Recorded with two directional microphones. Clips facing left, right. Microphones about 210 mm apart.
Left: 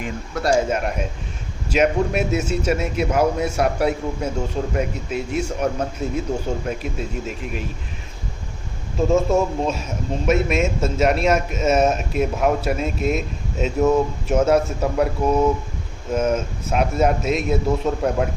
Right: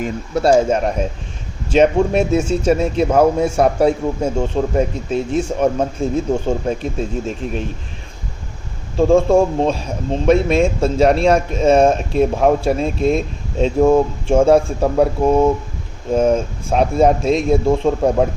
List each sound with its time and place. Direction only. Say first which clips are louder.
0.7 s a man's voice: right 6 dB; 35° right (ahead or behind)
9.0 s a man's voice: right 6 dB; 30° right (ahead or behind)